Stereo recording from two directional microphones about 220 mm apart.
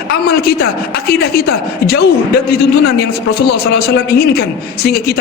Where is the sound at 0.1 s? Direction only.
45° left (ahead or behind).